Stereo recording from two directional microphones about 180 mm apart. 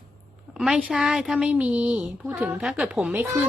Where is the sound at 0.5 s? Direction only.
5° right (ahead or behind).